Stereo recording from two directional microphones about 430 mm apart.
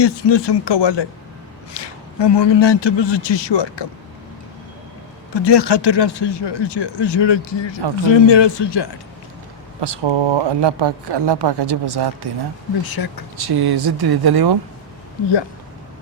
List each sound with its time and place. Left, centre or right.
0.0 s a man's voice: left
5.3 s a man's voice: left
9.8 s speech: right
12.8 s speech: left
13.3 s speech: right